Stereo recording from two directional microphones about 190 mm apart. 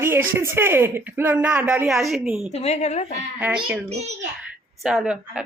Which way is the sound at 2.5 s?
35° left (ahead or behind).